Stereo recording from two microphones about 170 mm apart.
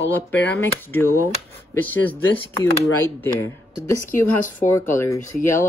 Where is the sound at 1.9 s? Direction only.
10° left (ahead or behind).